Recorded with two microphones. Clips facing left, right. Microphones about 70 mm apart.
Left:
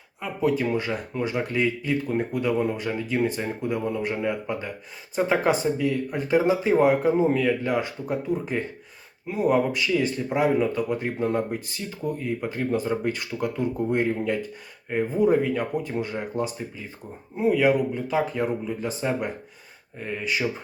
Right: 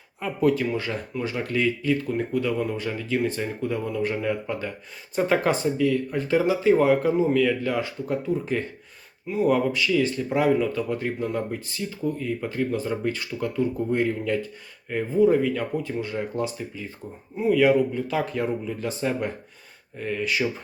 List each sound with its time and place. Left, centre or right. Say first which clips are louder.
0.4 s speech: right 1 dB; left
5.7 s speech: right 2 dB; left